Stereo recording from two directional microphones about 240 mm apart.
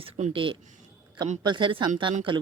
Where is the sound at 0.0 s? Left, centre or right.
Right.